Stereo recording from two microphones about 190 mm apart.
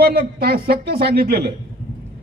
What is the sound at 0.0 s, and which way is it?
Speech, 55° right (ahead or behind).